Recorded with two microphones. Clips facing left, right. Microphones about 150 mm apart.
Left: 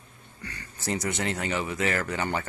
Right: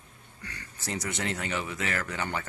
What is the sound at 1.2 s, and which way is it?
Speech, 10° left (ahead or behind).